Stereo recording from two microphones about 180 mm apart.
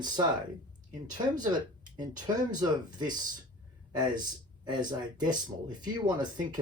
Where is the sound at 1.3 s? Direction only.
20° right (ahead or behind).